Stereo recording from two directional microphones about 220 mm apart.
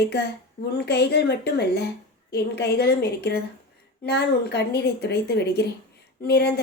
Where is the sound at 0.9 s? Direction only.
50° left (ahead or behind).